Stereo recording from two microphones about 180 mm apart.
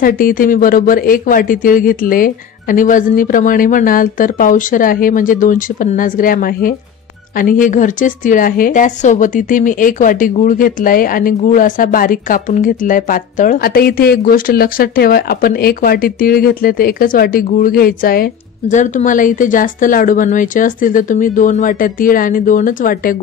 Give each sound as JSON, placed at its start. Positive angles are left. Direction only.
{"t": 0.0, "sound": "a woman's voice", "side_deg": 50}